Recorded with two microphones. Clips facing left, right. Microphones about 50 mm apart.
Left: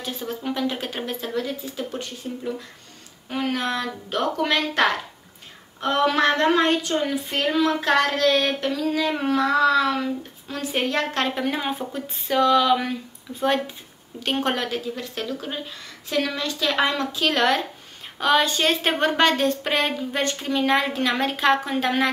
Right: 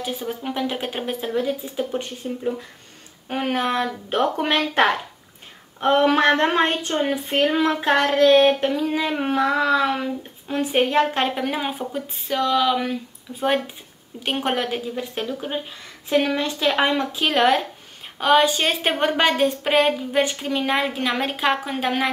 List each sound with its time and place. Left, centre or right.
0.0 s a woman's voice: centre
11.3 s speech: centre
13.3 s speech: left
14.3 s a woman's voice: centre